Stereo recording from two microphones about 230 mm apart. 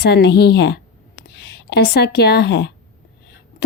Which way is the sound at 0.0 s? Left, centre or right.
Left.